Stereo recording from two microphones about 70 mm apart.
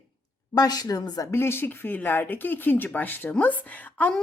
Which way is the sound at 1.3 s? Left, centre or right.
Left.